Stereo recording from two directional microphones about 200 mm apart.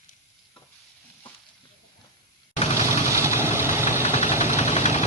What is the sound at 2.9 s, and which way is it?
Vehicle, 15° right (ahead or behind).